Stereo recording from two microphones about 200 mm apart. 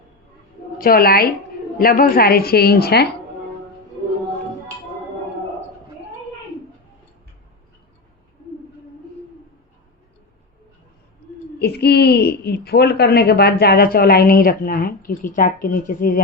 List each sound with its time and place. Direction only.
0.8 s a woman's voice: 45° left (ahead or behind)
11.6 s a woman's voice: 55° left (ahead or behind)